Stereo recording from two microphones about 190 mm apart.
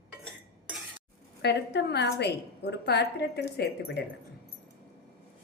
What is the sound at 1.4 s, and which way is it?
A woman's voice, 60° left (ahead or behind).